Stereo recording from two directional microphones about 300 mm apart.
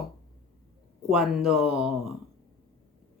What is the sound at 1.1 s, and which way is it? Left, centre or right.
Speech, centre.